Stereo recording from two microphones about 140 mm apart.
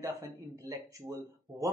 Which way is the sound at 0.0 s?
25° right (ahead or behind).